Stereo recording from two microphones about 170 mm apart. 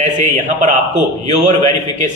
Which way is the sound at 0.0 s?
45° right (ahead or behind).